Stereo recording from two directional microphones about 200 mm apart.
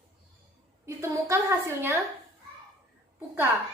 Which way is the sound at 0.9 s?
15° right (ahead or behind).